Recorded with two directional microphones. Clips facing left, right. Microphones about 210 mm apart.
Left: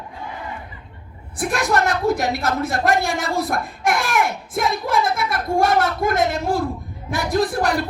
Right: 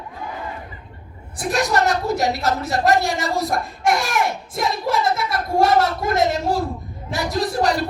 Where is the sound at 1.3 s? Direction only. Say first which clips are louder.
Even; 55° left (ahead or behind).